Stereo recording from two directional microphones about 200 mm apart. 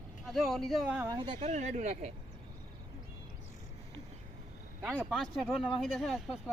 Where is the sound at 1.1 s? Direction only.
25° right (ahead or behind).